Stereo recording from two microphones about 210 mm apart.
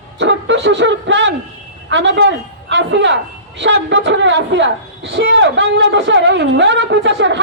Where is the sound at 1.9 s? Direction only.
60° right (ahead or behind).